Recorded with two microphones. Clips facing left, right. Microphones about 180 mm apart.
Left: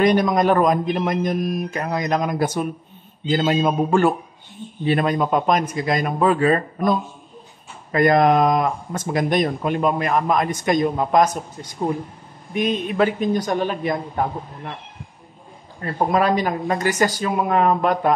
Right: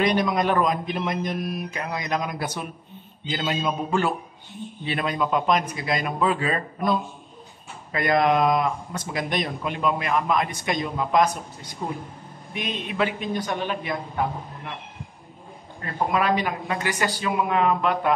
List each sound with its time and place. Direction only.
0.0 s speech: 45° left (ahead or behind)
12.5 s speech: 45° left (ahead or behind)
15.8 s speech: 40° left (ahead or behind)